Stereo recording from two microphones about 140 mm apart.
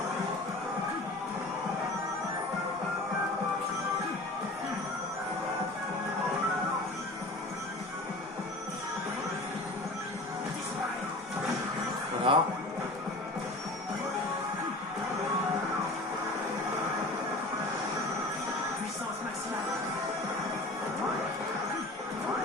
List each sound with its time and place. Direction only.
12.3 s speech: 35° right (ahead or behind)